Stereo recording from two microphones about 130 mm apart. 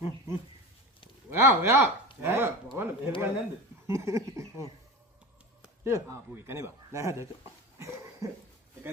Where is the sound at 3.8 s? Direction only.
20° right (ahead or behind).